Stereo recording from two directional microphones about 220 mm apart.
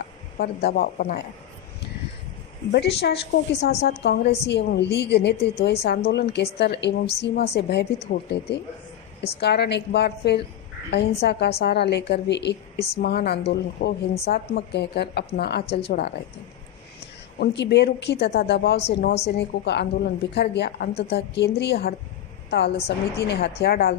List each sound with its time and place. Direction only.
0.3 s a woman's voice: 45° left (ahead or behind)
2.7 s a woman's voice: 50° left (ahead or behind)
17.4 s a woman's voice: 50° left (ahead or behind)